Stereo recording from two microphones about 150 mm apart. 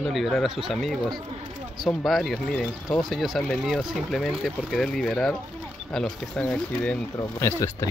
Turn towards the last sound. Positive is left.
turn(degrees=20)  # may be behind; listen again after turning